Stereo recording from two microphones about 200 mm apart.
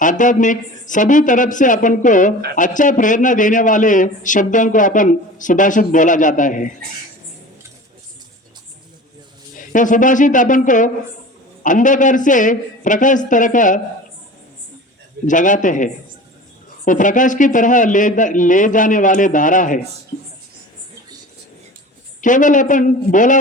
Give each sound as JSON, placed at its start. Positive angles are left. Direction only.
{"t": 0.0, "sound": "a man's voice", "side_deg": 40}
{"t": 9.6, "sound": "a man's voice", "side_deg": 40}
{"t": 15.3, "sound": "a man's voice", "side_deg": 40}
{"t": 22.2, "sound": "a man's voice", "side_deg": 40}